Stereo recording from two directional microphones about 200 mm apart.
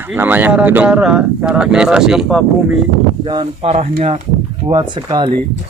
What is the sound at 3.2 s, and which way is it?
Speech, 25° right (ahead or behind).